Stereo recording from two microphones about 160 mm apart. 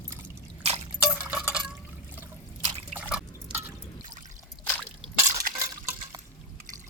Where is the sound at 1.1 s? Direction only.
5° right (ahead or behind).